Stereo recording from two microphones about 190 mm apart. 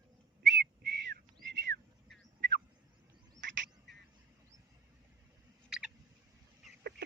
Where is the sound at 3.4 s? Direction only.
70° right (ahead or behind).